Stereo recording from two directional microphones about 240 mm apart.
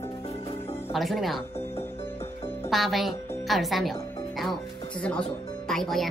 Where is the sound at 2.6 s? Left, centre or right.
Centre.